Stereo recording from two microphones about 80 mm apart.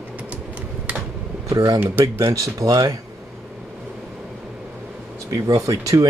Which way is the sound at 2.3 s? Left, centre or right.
Right.